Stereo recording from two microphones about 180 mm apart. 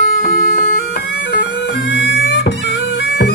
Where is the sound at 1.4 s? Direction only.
85° left.